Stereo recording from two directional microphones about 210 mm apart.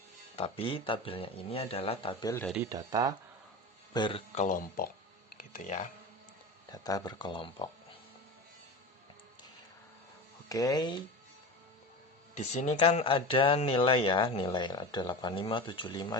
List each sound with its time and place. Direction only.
0.3 s speech: 25° left (ahead or behind)
2.6 s speech: 15° right (ahead or behind)
3.9 s speech: 20° left (ahead or behind)
4.4 s speech: 40° left (ahead or behind)
6.7 s speech: 20° left (ahead or behind)
10.5 s speech: 15° left (ahead or behind)
12.3 s speech: 30° left (ahead or behind)